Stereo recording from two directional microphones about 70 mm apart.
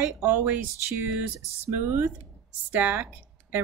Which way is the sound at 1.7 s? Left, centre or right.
Right.